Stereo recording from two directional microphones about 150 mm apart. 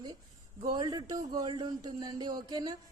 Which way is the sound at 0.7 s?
25° right (ahead or behind).